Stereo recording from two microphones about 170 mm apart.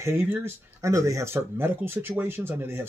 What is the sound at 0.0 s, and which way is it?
Speech, 15° right (ahead or behind).